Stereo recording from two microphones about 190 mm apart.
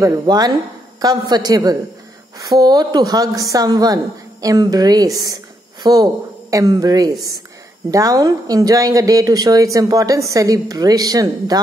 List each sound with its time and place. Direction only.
0.0 s a woman's voice: 20° right (ahead or behind)